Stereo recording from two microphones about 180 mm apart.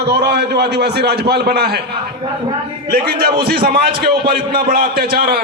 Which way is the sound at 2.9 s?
60° right (ahead or behind).